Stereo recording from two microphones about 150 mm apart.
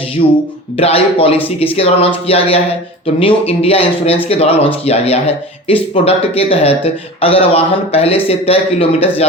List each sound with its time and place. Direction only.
0.2 s speech: 50° left (ahead or behind)